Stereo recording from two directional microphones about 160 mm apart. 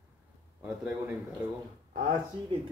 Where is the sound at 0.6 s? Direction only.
5° right (ahead or behind).